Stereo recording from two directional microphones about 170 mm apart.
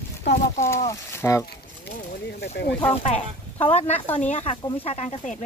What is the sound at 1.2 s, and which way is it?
Speech, 10° left (ahead or behind).